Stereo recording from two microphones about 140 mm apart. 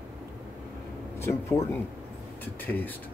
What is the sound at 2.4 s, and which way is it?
Speech, 15° left (ahead or behind).